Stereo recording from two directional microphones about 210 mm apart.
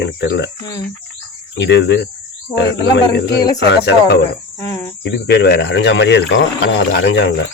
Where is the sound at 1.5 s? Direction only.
55° left (ahead or behind).